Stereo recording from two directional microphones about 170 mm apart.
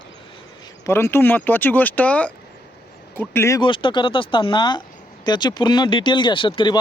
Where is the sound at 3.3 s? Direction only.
15° left (ahead or behind).